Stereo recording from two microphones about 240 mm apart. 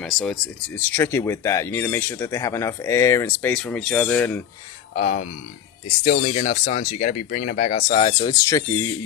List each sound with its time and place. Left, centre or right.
0.0 s speech: centre
4.9 s speech: left; by 8.6 s centre